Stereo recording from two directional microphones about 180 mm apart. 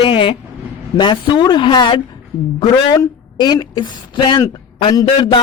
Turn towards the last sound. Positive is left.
turn(degrees=25)  # may be behind; listen again after turning